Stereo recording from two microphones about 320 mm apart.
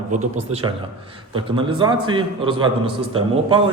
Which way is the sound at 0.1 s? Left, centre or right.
Right.